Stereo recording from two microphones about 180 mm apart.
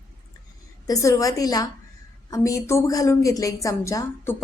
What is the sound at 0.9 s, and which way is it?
A woman's voice, 20° left (ahead or behind).